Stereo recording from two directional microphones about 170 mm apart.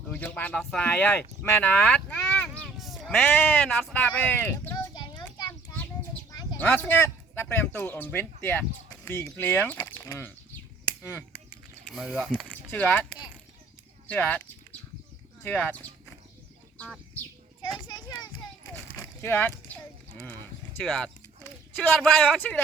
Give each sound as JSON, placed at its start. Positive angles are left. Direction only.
{"t": 0.1, "sound": "speech", "side_deg": 10}
{"t": 4.9, "sound": "a sound", "side_deg": 25}
{"t": 5.7, "sound": "a sound", "side_deg": 10}
{"t": 6.6, "sound": "a man's voice", "side_deg": 10}
{"t": 11.9, "sound": "speech", "side_deg": -5}
{"t": 14.1, "sound": "speech", "side_deg": 10}
{"t": 16.7, "sound": "bird", "side_deg": 5}
{"t": 18.9, "sound": "a sound", "side_deg": 15}
{"t": 20.2, "sound": "speech", "side_deg": 10}